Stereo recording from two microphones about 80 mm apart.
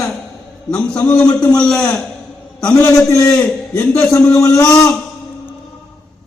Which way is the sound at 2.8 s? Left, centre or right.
Left.